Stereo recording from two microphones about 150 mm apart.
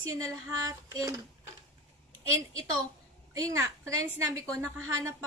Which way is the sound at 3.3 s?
20° right (ahead or behind).